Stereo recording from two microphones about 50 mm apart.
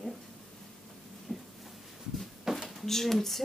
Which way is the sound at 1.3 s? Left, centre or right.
Centre.